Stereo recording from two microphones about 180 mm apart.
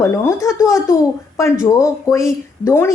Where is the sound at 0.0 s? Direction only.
15° left (ahead or behind).